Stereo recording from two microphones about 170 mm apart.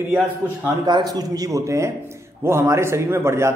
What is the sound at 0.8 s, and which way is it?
A man's voice, 25° right (ahead or behind).